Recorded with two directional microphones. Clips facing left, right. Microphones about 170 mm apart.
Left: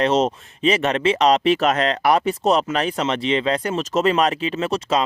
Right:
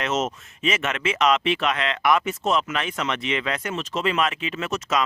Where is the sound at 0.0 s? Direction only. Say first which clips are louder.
Left 7 dB; 35° left (ahead or behind).